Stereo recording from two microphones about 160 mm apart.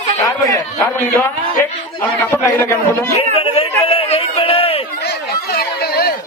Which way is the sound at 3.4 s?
35° left (ahead or behind).